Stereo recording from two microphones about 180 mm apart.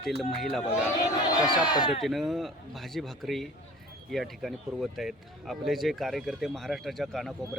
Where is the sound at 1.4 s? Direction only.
25° left (ahead or behind).